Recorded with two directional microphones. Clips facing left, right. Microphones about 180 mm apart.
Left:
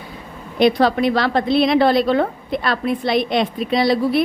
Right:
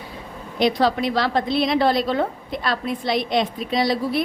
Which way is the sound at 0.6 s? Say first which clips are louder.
Left 4 dB; 55° left (ahead or behind).